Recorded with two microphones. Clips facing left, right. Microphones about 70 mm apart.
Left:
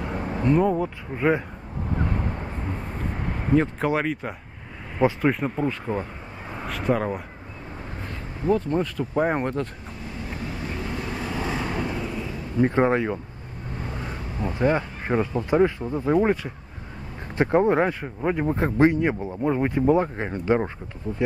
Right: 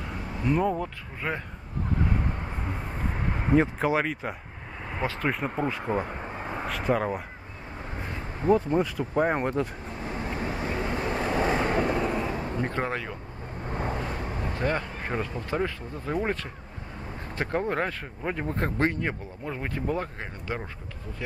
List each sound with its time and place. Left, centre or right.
0.5 s speech: centre
0.8 s speech: centre
3.5 s speech: centre
5.9 s speech: centre
8.5 s speech: centre
9.1 s speech: centre
10.1 s vehicle: right
12.6 s speech: left
14.4 s speech: centre
17.4 s speech: centre